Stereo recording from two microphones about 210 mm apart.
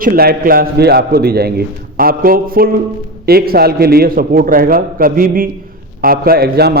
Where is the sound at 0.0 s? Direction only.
45° right (ahead or behind).